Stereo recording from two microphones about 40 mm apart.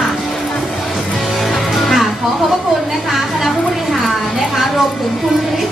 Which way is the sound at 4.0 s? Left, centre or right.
Centre.